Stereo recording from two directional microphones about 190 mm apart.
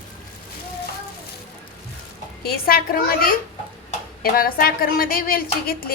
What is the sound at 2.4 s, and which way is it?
A woman's voice, 50° left (ahead or behind).